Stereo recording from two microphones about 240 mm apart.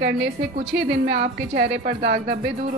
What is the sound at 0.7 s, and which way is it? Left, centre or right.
A woman's voice, right.